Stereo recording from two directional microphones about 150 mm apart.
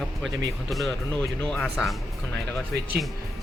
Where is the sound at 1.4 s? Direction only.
5° left (ahead or behind).